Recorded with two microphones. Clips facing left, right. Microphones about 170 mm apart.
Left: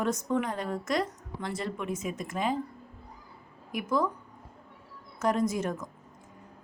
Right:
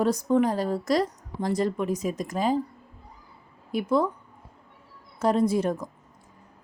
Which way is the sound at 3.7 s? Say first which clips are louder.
Right 5 dB; 30° right (ahead or behind).